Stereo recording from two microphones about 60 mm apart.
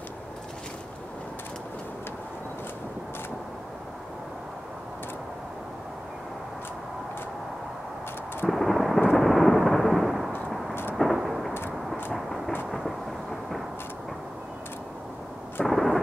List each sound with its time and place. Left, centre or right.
8.5 s thunder: centre
10.7 s vehicle: left
11.1 s thunder: centre
11.7 s vehicle: centre
12.7 s thunder: centre
15.6 s thunder: centre